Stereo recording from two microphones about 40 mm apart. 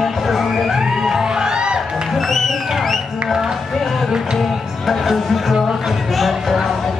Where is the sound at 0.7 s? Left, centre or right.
Centre.